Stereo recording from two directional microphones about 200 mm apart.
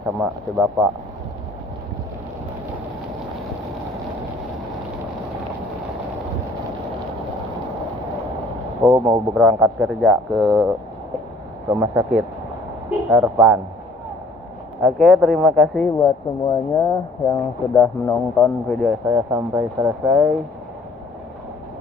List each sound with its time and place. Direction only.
0.2 s speech: 5° right (ahead or behind)
8.8 s speech: 15° right (ahead or behind)
9.3 s speech: centre (ahead or behind)
11.7 s speech: 15° right (ahead or behind)
13.1 s speech: centre (ahead or behind)
14.8 s speech: centre (ahead or behind)
15.8 s speech: 15° left (ahead or behind)
18.7 s speech: centre (ahead or behind)
19.0 s speech: 10° right (ahead or behind)